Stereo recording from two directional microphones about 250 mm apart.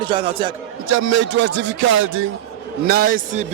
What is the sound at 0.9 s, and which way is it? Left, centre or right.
A man's voice, right.